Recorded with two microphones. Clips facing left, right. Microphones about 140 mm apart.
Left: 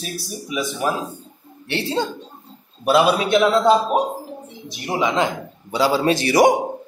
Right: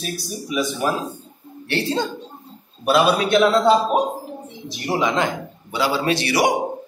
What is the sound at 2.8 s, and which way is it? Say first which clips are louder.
A man's voice: left 1 dB; 20° left (ahead or behind).